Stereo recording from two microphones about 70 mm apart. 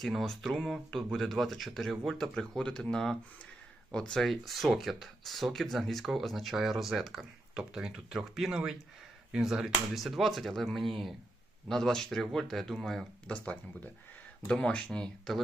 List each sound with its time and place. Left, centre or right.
0.0 s speech: centre
13.2 s speech: centre